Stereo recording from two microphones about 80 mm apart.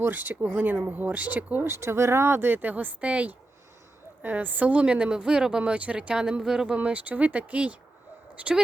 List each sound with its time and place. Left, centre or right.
0.0 s speech: right
1.6 s a woman's voice: right; by 6.7 s centre
6.7 s a woman's voice: centre